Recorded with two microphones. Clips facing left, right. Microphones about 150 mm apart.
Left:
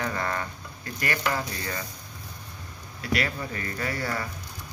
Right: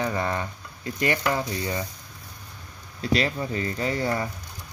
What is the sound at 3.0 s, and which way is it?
Speech, 25° right (ahead or behind).